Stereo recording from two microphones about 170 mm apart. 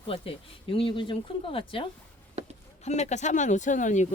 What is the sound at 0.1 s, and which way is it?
Speech, 30° left (ahead or behind).